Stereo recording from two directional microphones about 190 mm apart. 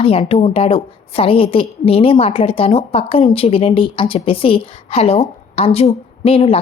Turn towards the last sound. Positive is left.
turn(degrees=30)  # may be behind; listen again after turning